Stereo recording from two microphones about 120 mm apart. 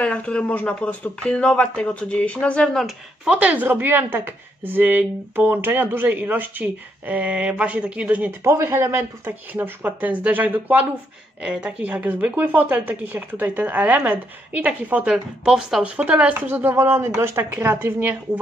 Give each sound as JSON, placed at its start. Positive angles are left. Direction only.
{"t": 0.0, "sound": "speech", "side_deg": 10}
{"t": 3.3, "sound": "a woman's voice", "side_deg": -15}